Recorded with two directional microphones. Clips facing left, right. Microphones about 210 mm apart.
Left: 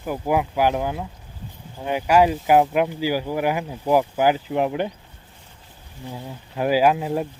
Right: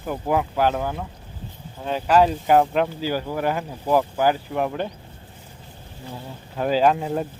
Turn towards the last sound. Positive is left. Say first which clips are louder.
# left 1 dB
turn(degrees=5)  # may be behind; listen again after turning